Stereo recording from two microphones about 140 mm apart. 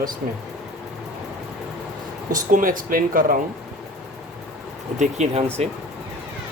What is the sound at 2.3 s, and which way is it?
Speech, 75° right (ahead or behind).